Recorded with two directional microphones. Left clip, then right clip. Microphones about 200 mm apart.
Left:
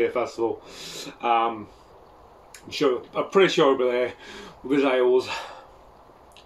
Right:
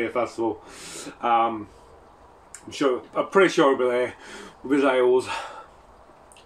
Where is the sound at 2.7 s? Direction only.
Centre (ahead or behind).